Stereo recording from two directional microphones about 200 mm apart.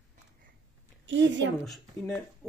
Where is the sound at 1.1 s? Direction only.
65° right (ahead or behind).